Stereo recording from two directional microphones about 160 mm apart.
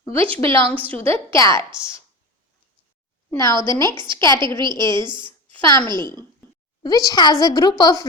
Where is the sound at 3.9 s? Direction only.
30° right (ahead or behind).